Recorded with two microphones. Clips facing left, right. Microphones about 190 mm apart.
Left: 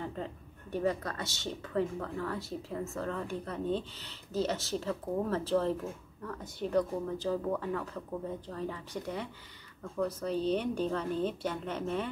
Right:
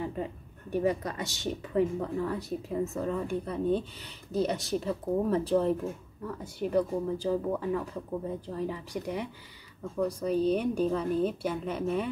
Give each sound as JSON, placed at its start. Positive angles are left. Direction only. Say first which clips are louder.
{"t": 0.0, "sound": "a woman's voice", "louder": "right 4 dB", "side_deg": -10}